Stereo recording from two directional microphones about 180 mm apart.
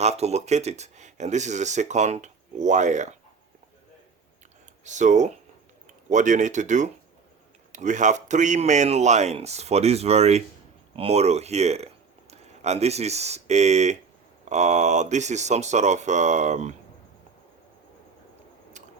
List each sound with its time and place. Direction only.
0.0 s speech: 35° right (ahead or behind)
4.8 s speech: 40° right (ahead or behind)